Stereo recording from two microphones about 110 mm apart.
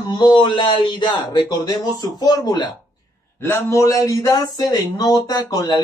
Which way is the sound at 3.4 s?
25° left (ahead or behind).